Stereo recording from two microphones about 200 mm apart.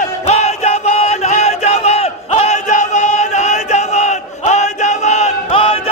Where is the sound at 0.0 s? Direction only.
35° left (ahead or behind).